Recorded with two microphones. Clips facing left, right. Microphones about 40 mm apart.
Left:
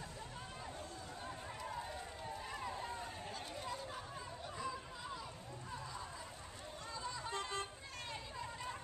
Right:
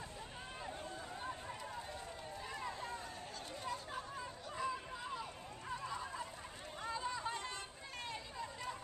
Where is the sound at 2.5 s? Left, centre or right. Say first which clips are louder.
Right 2 dB; centre.